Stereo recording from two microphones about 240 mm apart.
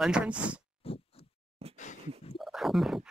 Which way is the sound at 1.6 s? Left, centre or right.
Right.